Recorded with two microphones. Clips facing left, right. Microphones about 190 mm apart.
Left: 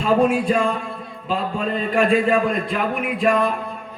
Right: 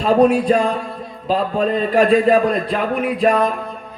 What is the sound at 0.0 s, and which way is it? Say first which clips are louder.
Speech: right 4 dB; 35° right (ahead or behind).